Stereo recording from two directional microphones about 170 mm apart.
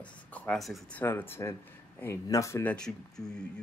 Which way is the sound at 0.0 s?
5° left (ahead or behind).